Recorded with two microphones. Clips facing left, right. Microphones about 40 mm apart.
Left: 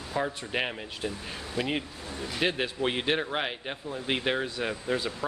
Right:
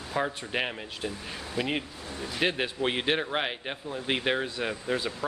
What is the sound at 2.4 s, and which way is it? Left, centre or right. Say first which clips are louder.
A man's voice: even; centre.